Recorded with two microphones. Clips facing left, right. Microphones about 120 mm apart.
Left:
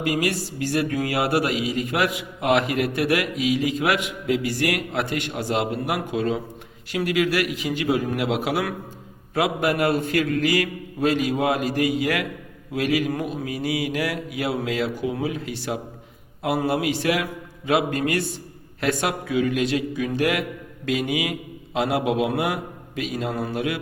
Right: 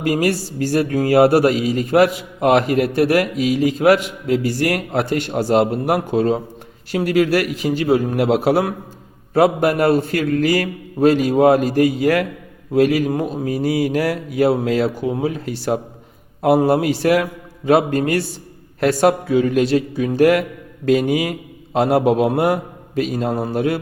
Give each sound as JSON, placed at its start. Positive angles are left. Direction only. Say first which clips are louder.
{"t": 0.0, "sound": "speech", "louder": "right 5 dB", "side_deg": -40}